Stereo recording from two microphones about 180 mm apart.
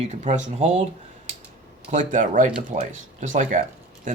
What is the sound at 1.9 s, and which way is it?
Speech, 45° right (ahead or behind).